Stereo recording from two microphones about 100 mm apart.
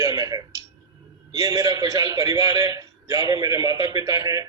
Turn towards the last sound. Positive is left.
turn(degrees=-35)  # may be behind; listen again after turning